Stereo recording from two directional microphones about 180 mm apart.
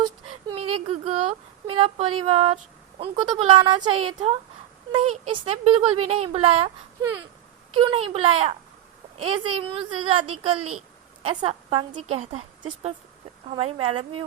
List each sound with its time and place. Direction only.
0.4 s a woman's voice: 30° right (ahead or behind)
7.7 s a woman's voice: 30° right (ahead or behind)